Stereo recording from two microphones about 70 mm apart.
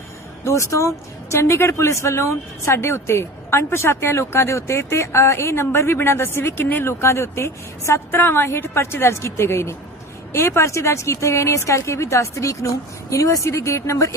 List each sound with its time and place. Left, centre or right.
0.4 s a woman's voice: left
7.0 s a woman's voice: left